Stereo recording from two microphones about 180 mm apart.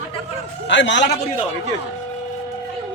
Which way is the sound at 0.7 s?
85° left.